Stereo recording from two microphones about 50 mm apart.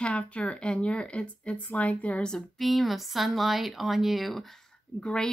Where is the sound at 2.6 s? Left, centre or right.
Centre.